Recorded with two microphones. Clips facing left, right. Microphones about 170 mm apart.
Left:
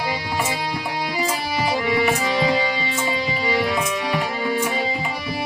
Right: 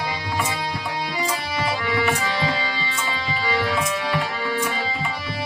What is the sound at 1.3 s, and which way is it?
Music, 20° left (ahead or behind).